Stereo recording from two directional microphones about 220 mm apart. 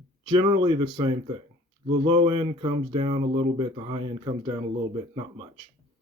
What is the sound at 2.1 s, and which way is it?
Speech, 25° right (ahead or behind).